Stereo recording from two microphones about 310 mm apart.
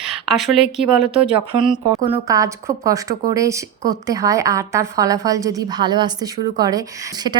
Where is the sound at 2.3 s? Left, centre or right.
Centre.